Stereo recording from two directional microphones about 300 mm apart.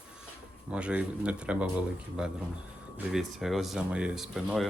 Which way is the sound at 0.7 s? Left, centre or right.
Centre.